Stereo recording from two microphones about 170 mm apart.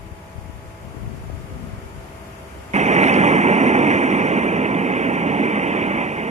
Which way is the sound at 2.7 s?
40° right (ahead or behind).